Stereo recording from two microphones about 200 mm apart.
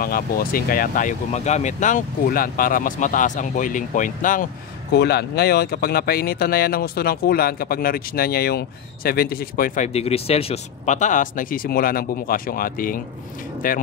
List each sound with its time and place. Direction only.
0.0 s speech: 45° left (ahead or behind)
4.9 s speech: 55° left (ahead or behind)
9.9 s speech: 30° left (ahead or behind)